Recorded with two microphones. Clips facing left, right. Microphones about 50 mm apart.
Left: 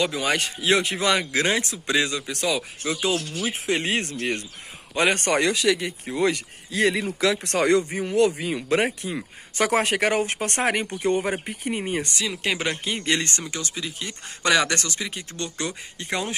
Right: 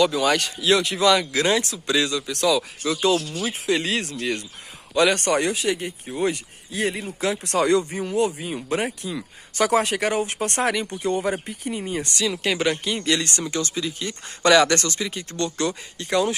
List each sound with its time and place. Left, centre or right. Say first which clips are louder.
0.0 s speech: right 4 dB; left
5.5 s speech: left 2 dB; left
7.3 s speech: right 3 dB; left
8.4 s speech: left 3 dB; left
12.2 s speech: right 3 dB; left
13.4 s speech: right 5 dB; centre; by 16.3 s left